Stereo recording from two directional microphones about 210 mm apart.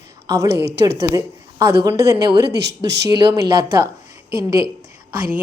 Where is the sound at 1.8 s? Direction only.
15° right (ahead or behind).